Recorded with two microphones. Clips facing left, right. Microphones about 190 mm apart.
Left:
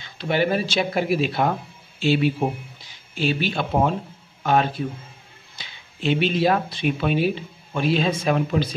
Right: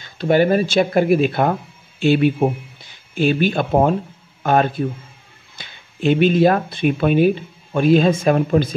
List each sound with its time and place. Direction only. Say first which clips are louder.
0.0 s a man's voice: right 7 dB; 45° right (ahead or behind)